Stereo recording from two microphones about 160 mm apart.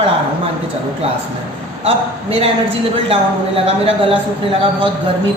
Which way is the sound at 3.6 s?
35° right (ahead or behind).